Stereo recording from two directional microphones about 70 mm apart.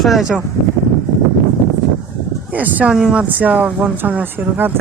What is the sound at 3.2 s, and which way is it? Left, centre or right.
Speech, right.